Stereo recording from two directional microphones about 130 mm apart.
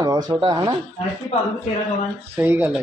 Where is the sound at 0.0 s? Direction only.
30° right (ahead or behind).